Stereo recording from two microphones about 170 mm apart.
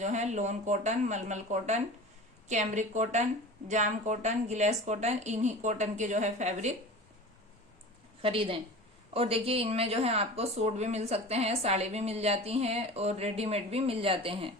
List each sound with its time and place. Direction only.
0.0 s a woman's voice: 40° right (ahead or behind)
8.2 s speech: 35° right (ahead or behind)